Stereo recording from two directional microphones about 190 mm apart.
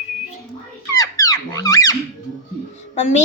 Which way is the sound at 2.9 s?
40° left (ahead or behind).